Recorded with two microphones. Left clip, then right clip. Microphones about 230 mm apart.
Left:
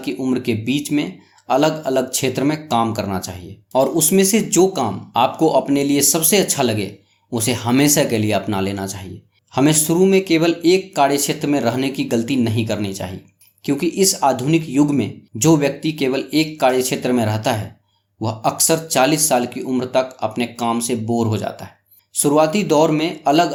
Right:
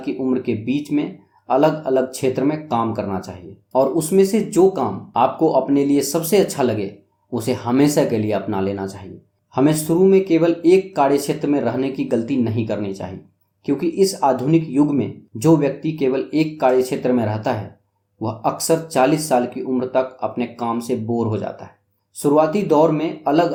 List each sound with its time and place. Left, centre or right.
0.0 s speech: left